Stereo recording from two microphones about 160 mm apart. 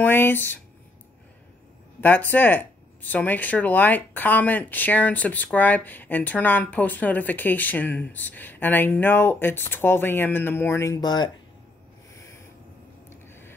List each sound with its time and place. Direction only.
0.0 s speech: 15° left (ahead or behind)
2.0 s speech: 10° left (ahead or behind)
13.1 s a sound: 15° left (ahead or behind)